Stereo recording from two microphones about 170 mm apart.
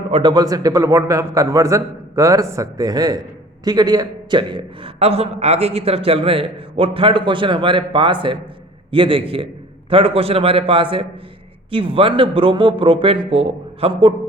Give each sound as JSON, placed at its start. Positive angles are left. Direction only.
{"t": 0.1, "sound": "a man's voice", "side_deg": -25}